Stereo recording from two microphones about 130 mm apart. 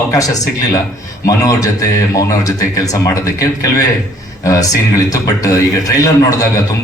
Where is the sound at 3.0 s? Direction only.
25° left (ahead or behind).